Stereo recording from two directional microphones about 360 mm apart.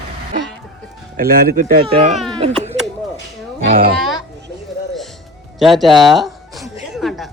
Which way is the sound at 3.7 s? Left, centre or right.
Right.